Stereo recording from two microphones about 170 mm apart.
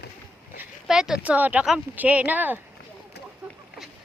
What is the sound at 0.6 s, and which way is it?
Speech, 5° right (ahead or behind).